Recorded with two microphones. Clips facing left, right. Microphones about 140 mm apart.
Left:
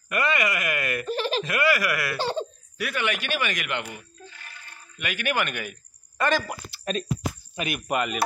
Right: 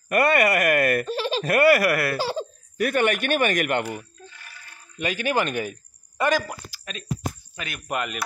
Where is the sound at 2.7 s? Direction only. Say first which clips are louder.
Right 7 dB; 45° right (ahead or behind).